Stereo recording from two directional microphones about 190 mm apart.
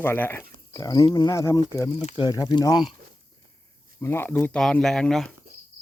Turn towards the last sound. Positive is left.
turn(degrees=5)  # may be behind; listen again after turning